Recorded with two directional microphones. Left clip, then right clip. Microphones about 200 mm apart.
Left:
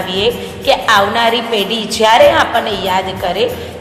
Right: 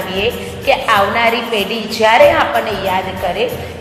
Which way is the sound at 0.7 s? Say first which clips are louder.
Left 1 dB; 20° left (ahead or behind).